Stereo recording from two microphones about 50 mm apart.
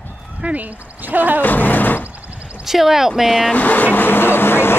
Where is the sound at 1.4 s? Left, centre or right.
Left.